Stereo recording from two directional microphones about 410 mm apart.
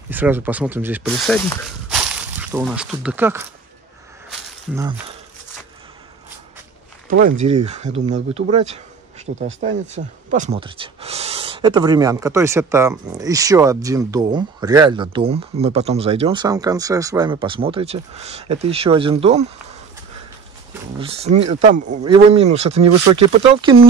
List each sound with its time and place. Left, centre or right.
0.1 s speech: centre
1.9 s a sound: centre
4.7 s speech: centre
7.1 s speech: centre
21.0 s speech: centre